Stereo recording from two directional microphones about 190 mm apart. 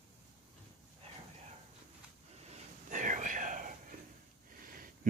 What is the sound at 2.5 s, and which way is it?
Whispering, 40° right (ahead or behind).